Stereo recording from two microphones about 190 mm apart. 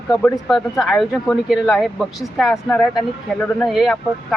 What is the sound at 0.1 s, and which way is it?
Speech, 5° left (ahead or behind).